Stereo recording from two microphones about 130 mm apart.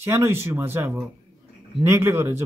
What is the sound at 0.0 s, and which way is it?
Speech, 20° right (ahead or behind).